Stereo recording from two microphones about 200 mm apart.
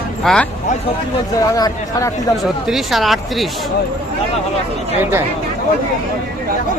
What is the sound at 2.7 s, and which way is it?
Speech, centre (ahead or behind).